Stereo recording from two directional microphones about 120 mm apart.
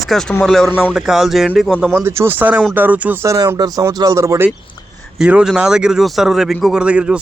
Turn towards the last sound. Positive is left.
turn(degrees=-10)  # may be behind; listen again after turning